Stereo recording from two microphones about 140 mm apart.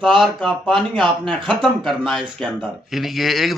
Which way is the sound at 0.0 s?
Centre (ahead or behind).